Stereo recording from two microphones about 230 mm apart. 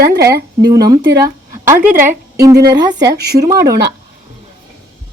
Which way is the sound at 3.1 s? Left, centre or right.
Right.